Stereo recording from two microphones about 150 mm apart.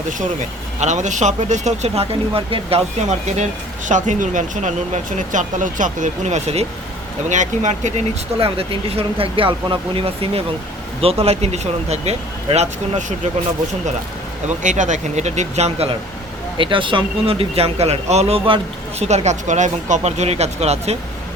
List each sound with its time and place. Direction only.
0.8 s speech: 55° right (ahead or behind)
8.4 s speech: 40° right (ahead or behind)
14.6 s speech: 55° right (ahead or behind)
16.6 s speech: 35° right (ahead or behind)